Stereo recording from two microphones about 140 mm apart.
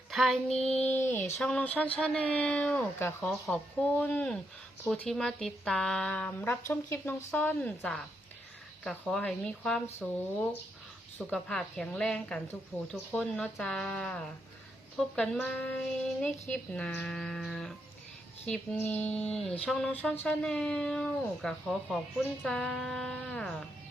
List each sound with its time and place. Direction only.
0.1 s female singing: centre (ahead or behind)
0.6 s speech: 10° left (ahead or behind)
16.7 s speech: 10° left (ahead or behind)